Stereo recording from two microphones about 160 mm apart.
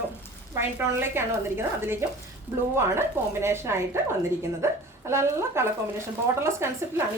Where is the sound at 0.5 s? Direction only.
15° right (ahead or behind).